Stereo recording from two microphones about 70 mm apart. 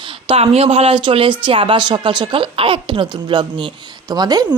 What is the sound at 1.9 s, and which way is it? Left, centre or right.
Speech, right.